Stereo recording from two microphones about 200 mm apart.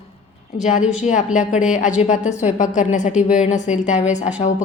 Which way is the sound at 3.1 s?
5° right (ahead or behind).